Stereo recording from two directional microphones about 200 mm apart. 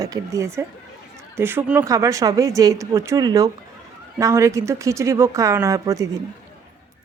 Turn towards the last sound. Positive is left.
turn(degrees=-15)  # may be behind; listen again after turning